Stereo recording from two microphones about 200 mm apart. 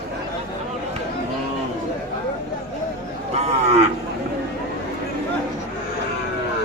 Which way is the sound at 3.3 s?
30° right (ahead or behind).